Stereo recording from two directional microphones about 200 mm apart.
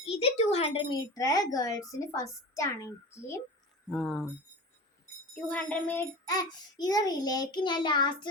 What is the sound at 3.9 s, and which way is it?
Speech, 5° left (ahead or behind).